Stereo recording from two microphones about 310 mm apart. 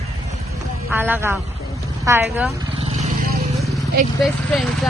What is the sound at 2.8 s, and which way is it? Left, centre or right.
Vehicle, right.